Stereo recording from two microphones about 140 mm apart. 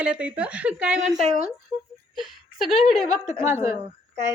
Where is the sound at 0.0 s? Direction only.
10° right (ahead or behind).